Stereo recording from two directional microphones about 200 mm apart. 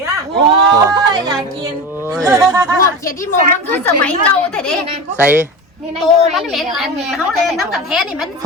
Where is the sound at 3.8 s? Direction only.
10° left (ahead or behind).